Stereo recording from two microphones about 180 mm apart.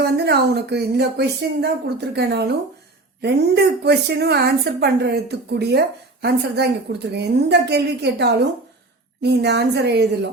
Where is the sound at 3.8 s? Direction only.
65° right (ahead or behind).